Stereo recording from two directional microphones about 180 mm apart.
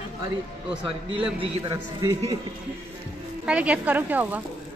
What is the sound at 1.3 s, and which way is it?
Speech, 30° right (ahead or behind).